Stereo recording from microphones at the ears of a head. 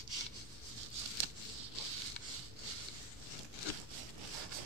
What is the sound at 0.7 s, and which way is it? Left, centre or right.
Scissors, right.